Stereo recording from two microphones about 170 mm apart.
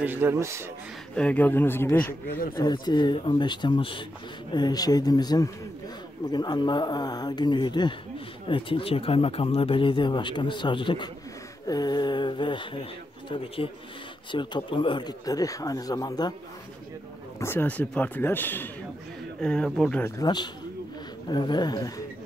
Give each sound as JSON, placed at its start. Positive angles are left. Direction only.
{"t": 0.0, "sound": "speech", "side_deg": -10}
{"t": 1.1, "sound": "a man's voice", "side_deg": 10}
{"t": 2.5, "sound": "speech", "side_deg": 25}
{"t": 14.3, "sound": "speech", "side_deg": 30}
{"t": 17.4, "sound": "a man's voice", "side_deg": 15}
{"t": 20.2, "sound": "speech", "side_deg": 25}